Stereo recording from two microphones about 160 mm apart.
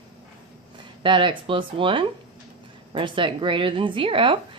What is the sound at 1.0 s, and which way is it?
A woman's voice, 30° right (ahead or behind).